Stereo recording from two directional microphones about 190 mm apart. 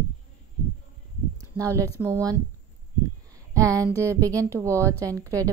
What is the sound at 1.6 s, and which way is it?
Speech, 15° right (ahead or behind).